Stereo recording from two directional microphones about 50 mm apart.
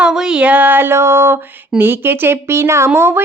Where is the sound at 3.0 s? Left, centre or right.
Right.